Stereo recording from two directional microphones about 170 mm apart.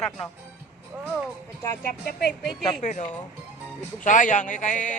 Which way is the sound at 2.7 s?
45° left (ahead or behind).